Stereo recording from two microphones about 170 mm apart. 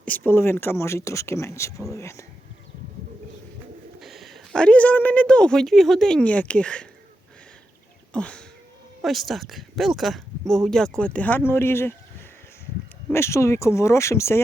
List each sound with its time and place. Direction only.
0.0 s speech: 10° left (ahead or behind)
4.0 s speech: centre (ahead or behind)
8.1 s a sound: 5° left (ahead or behind)
9.0 s speech: centre (ahead or behind)
13.1 s speech: 15° left (ahead or behind)